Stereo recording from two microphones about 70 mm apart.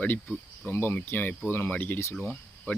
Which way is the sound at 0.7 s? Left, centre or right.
Left.